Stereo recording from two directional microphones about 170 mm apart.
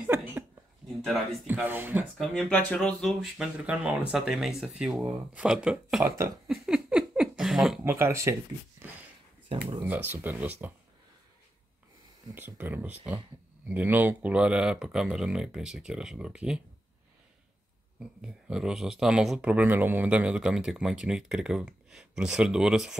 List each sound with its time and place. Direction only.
0.0 s a sound: 10° right (ahead or behind)
1.5 s speech: 10° right (ahead or behind)
2.1 s speech: 5° left (ahead or behind)
6.4 s a sound: centre (ahead or behind)
7.8 s speech: 15° right (ahead or behind)
9.8 s speech: 10° right (ahead or behind)
12.4 s speech: 10° right (ahead or behind)
18.2 s speech: 5° right (ahead or behind)